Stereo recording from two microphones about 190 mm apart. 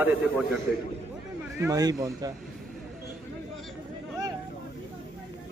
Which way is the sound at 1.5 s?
15° right (ahead or behind).